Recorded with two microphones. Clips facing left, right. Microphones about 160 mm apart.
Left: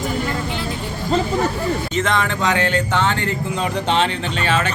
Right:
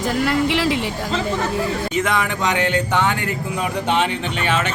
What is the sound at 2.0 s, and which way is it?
Speech, 10° right (ahead or behind).